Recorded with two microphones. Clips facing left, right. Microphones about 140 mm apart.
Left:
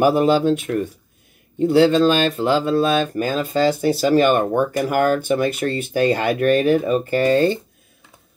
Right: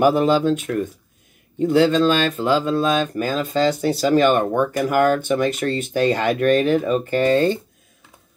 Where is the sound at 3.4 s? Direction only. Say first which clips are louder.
Left 1 dB; 10° left (ahead or behind).